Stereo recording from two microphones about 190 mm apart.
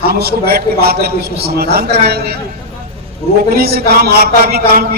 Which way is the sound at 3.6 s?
55° right (ahead or behind).